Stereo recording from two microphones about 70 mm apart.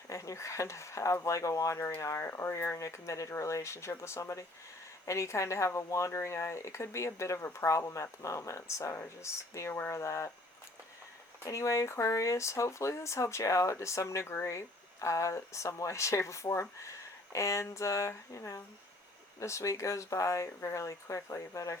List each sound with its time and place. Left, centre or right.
0.1 s speech: left
2.2 s speech: left
11.4 s speech: left